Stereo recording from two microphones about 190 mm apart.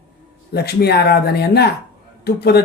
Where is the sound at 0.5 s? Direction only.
60° left (ahead or behind).